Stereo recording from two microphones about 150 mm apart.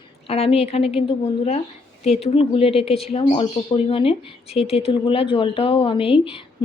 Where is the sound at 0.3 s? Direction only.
40° left (ahead or behind).